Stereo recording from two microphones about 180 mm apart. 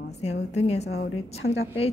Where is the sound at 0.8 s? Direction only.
65° left (ahead or behind).